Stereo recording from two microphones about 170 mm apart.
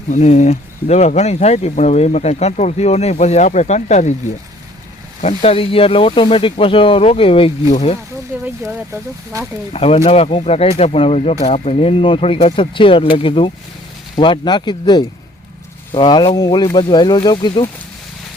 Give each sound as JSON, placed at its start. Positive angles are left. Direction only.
{"t": 0.1, "sound": "speech", "side_deg": 45}
{"t": 5.2, "sound": "speech", "side_deg": 35}
{"t": 8.3, "sound": "speech", "side_deg": -10}
{"t": 9.7, "sound": "speech", "side_deg": 35}